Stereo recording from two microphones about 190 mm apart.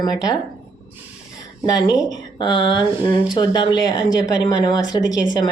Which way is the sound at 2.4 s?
25° left (ahead or behind).